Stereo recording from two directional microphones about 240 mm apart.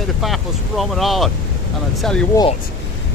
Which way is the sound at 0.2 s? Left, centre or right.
Centre.